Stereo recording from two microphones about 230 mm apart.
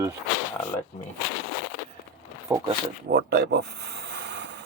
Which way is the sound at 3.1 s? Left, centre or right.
Right.